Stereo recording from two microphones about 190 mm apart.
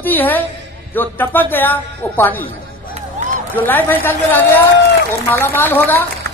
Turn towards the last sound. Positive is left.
turn(degrees=10)  # may be behind; listen again after turning